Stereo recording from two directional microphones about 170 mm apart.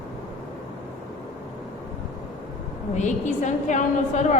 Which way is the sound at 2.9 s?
45° left (ahead or behind).